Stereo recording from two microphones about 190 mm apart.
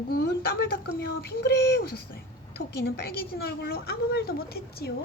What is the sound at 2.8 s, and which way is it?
A woman's voice, 55° left (ahead or behind).